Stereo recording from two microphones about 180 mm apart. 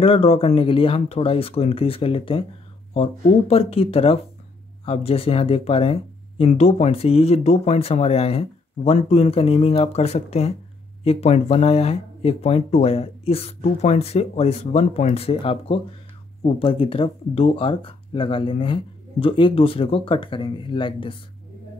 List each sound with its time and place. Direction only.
0.0 s speech: 35° left (ahead or behind)